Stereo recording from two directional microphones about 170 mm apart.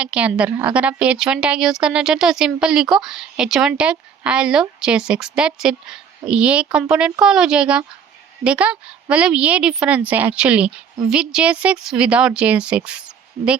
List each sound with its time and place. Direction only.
0.0 s a woman's voice: 5° right (ahead or behind)